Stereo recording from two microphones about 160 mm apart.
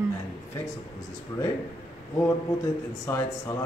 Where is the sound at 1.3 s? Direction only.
25° left (ahead or behind).